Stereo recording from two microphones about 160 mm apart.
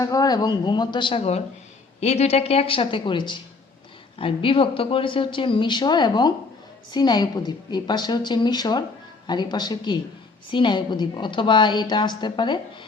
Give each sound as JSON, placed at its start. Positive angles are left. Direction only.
{"t": 0.0, "sound": "a woman's voice", "side_deg": 25}